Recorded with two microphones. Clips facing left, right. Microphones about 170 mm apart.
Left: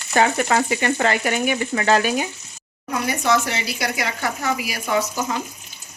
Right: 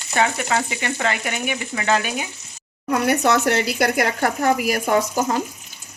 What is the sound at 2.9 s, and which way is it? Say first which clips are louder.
Speech: right 3 dB; 65° right (ahead or behind).